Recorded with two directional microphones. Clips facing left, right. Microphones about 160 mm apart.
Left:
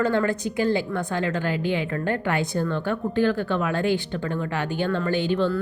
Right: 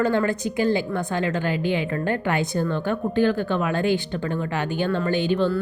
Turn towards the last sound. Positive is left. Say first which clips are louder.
# right 1 dB
turn(degrees=-15)  # may be behind; listen again after turning